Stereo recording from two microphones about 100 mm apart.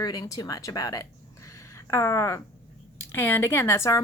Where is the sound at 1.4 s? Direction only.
30° left (ahead or behind).